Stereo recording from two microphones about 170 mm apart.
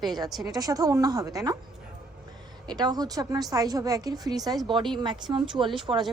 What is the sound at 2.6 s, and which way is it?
A woman's voice, 25° right (ahead or behind).